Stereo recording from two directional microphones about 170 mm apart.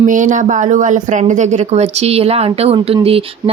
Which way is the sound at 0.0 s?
50° right (ahead or behind).